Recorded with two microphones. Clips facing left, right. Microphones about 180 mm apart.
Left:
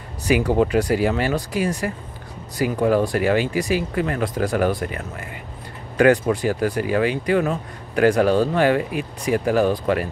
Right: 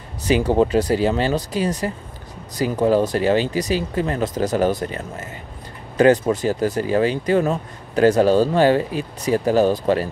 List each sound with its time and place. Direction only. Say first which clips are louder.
0.3 s speech: right 1 dB; 25° right (ahead or behind)
6.3 s speech: right 1 dB; 25° right (ahead or behind)